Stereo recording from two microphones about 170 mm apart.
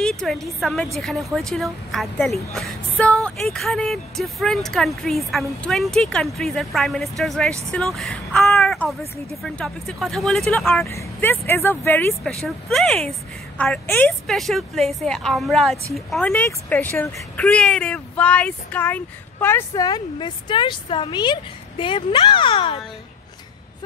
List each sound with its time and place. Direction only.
0.0 s a woman's voice: centre (ahead or behind)
10.9 s speech: 15° left (ahead or behind)
12.4 s a woman's voice: 5° left (ahead or behind); by 22.8 s 30° left (ahead or behind)